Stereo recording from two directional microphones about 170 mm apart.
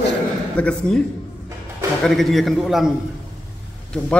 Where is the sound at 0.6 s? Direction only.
5° left (ahead or behind).